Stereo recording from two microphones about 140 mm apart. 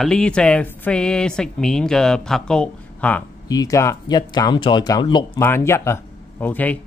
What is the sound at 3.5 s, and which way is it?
Speech, 25° left (ahead or behind).